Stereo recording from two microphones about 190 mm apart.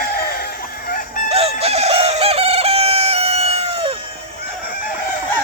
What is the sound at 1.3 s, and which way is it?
Chicken, 30° right (ahead or behind).